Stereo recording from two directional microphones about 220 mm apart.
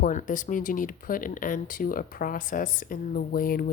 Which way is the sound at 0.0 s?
35° left (ahead or behind).